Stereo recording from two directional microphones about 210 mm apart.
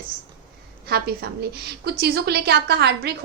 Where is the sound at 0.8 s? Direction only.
50° right (ahead or behind).